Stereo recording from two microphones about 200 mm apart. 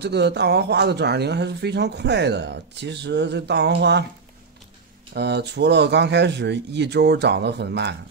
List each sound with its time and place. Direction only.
0.0 s speech: 55° right (ahead or behind)
5.1 s speech: 55° right (ahead or behind)